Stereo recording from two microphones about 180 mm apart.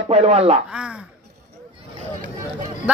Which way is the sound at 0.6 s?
5° right (ahead or behind).